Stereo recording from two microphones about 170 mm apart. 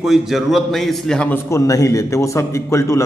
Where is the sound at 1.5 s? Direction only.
20° left (ahead or behind).